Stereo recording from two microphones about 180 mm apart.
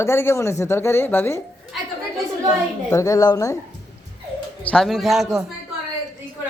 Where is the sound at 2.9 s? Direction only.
20° left (ahead or behind).